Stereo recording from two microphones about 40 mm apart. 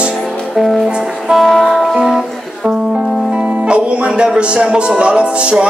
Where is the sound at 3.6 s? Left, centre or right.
Right.